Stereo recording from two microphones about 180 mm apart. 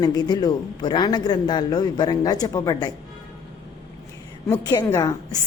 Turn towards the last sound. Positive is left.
turn(degrees=20)  # may be behind; listen again after turning